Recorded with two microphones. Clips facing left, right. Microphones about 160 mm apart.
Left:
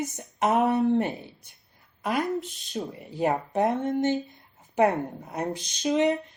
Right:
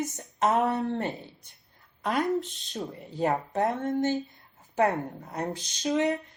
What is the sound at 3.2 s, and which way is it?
Speech, 15° left (ahead or behind).